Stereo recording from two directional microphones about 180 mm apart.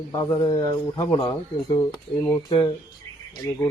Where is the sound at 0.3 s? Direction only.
25° left (ahead or behind).